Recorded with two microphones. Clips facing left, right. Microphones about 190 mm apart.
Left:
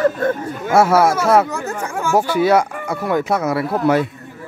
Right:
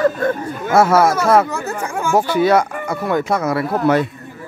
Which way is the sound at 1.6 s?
5° right (ahead or behind).